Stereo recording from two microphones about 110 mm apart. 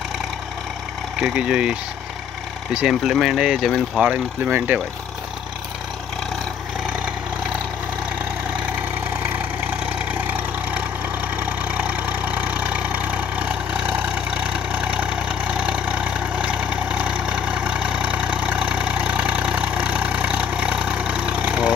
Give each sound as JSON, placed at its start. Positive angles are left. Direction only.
{"t": 1.2, "sound": "speech", "side_deg": -5}
{"t": 8.5, "sound": "vehicle", "side_deg": -15}